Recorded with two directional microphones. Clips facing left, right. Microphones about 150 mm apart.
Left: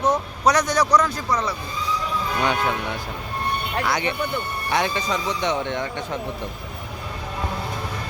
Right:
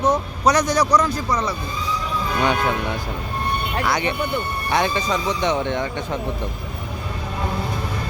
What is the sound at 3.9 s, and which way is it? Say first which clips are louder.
Speech: right 2 dB; 35° right (ahead or behind).